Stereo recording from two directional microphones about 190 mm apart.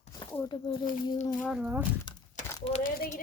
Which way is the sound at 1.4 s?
5° right (ahead or behind).